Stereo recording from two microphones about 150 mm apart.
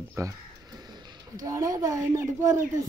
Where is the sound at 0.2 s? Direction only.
20° right (ahead or behind).